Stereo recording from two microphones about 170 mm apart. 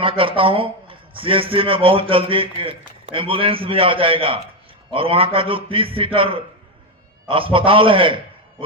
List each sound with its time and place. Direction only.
0.0 s a man's voice: 30° right (ahead or behind)